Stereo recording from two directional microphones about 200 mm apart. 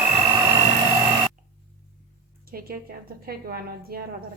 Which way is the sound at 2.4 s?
50° right (ahead or behind).